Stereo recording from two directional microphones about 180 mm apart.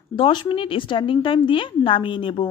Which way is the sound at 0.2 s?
25° left (ahead or behind).